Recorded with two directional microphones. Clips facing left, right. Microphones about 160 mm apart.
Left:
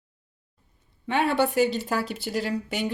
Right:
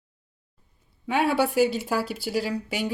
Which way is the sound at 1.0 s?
5° right (ahead or behind).